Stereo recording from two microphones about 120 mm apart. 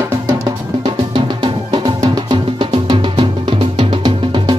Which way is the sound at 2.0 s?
35° right (ahead or behind).